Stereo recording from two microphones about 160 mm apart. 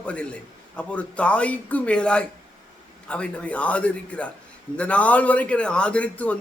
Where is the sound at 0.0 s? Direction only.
10° left (ahead or behind).